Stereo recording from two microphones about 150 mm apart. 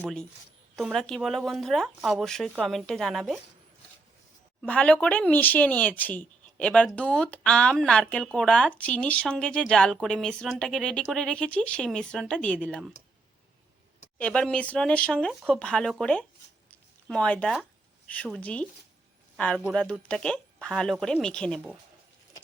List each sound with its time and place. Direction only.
0.8 s speech: centre (ahead or behind)
4.6 s speech: 10° left (ahead or behind)
14.2 s speech: 5° left (ahead or behind)